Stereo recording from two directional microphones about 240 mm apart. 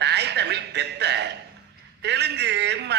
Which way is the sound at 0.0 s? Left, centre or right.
Right.